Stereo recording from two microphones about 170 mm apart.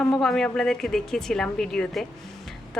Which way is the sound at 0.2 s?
Centre (ahead or behind).